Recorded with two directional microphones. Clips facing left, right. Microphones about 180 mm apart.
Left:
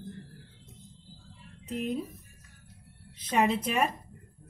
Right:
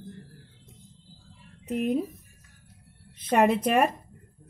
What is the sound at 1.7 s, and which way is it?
Speech, 55° right (ahead or behind).